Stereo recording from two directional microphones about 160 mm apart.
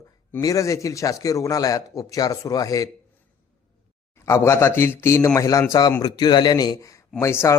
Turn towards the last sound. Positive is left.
turn(degrees=15)  # may be behind; listen again after turning